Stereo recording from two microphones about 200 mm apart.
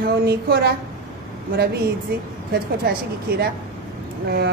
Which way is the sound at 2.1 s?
50° right (ahead or behind).